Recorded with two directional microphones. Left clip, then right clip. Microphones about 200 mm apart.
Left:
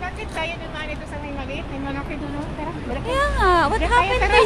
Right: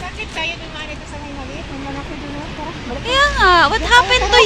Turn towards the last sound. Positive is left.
turn(degrees=0)  # may be behind; listen again after turning